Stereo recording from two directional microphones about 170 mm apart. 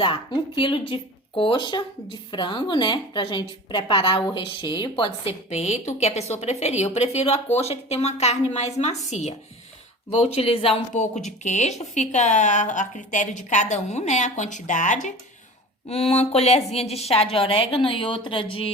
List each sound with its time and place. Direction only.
0.0 s a woman's voice: 30° left (ahead or behind)